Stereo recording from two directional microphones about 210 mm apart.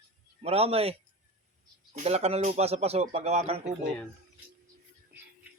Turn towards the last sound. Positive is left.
turn(degrees=-30)  # may be behind; listen again after turning